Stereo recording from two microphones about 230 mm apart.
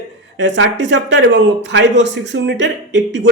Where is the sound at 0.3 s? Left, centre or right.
Right.